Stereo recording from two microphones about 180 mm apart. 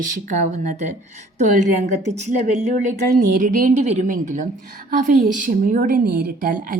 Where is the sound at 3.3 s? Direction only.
50° right (ahead or behind).